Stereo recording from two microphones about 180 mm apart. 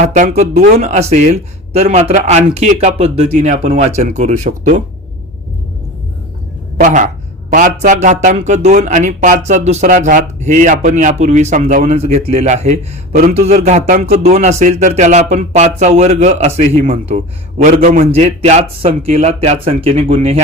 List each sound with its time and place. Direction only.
0.1 s speech: 40° right (ahead or behind)
6.7 s speech: 45° right (ahead or behind)